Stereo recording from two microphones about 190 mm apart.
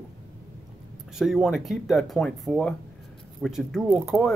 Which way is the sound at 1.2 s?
Centre (ahead or behind).